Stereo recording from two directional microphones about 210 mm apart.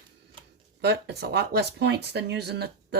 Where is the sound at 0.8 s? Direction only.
50° right (ahead or behind).